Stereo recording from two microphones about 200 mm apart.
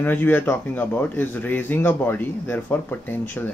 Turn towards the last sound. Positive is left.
turn(degrees=10)  # may be behind; listen again after turning